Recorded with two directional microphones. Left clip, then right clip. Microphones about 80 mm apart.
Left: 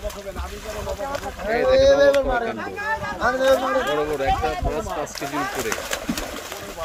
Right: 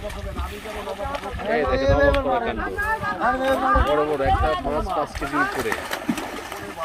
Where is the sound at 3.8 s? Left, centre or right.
Centre.